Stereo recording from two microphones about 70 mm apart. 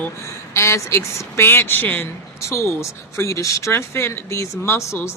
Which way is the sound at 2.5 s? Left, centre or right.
Left.